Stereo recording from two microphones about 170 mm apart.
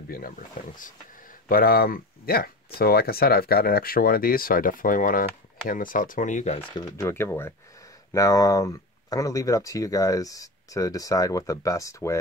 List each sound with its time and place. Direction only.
1.5 s speech: 60° left (ahead or behind); by 6.6 s 45° left (ahead or behind)
6.7 s speech: 15° left (ahead or behind)